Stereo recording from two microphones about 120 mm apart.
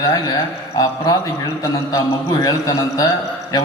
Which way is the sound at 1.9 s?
35° left (ahead or behind).